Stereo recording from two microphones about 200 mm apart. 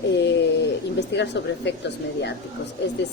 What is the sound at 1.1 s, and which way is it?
Speech, 60° left (ahead or behind).